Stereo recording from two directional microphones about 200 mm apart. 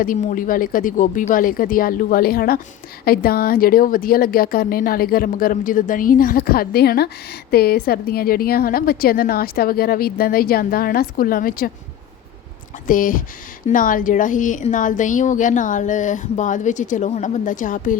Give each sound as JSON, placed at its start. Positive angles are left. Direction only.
{"t": 0.0, "sound": "a woman's voice", "side_deg": 40}
{"t": 12.9, "sound": "a woman's voice", "side_deg": 40}